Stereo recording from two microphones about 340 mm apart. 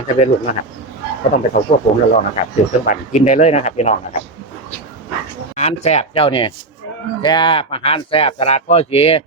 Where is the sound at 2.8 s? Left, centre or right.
Left.